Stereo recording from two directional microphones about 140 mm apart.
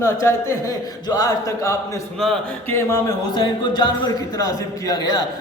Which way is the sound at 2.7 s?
25° left (ahead or behind).